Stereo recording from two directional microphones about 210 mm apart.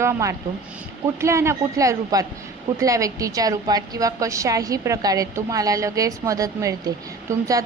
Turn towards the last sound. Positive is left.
turn(degrees=-15)  # may be behind; listen again after turning